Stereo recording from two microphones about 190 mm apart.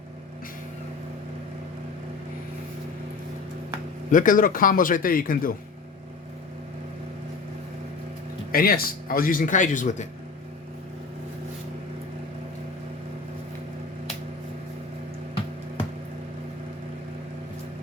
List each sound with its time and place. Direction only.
4.1 s a man's voice: 45° left (ahead or behind)
8.5 s a man's voice: 50° left (ahead or behind)